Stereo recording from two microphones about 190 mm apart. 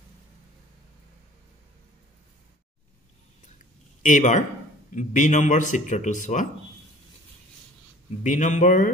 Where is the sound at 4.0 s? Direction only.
40° left (ahead or behind).